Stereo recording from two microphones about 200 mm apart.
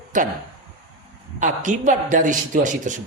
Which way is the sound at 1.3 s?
40° right (ahead or behind).